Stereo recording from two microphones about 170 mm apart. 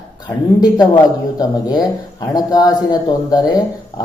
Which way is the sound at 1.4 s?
25° left (ahead or behind).